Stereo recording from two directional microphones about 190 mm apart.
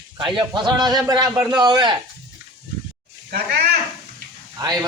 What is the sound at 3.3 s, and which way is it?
Speech, 55° right (ahead or behind).